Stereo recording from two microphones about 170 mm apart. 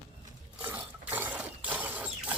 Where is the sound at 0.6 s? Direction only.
10° right (ahead or behind).